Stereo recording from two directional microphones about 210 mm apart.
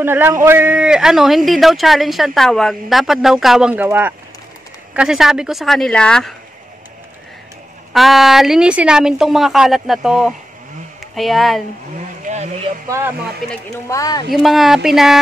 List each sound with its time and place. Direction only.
0.0 s a man's voice: 10° right (ahead or behind)
7.9 s a man's voice: centre (ahead or behind)
12.3 s speech: 35° right (ahead or behind)
12.9 s speech: 10° right (ahead or behind)
13.5 s speech: 15° left (ahead or behind)
14.3 s a man's voice: centre (ahead or behind)